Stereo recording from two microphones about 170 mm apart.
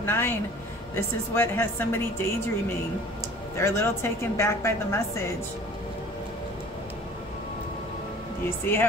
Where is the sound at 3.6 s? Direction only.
15° left (ahead or behind).